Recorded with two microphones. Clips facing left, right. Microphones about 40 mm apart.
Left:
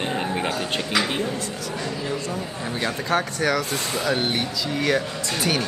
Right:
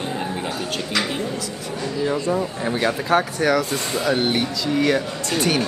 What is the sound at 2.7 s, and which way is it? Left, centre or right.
Speech, centre.